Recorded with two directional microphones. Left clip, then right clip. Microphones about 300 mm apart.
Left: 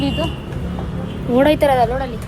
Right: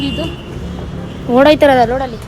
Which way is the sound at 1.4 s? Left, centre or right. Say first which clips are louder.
Right 5 dB; right.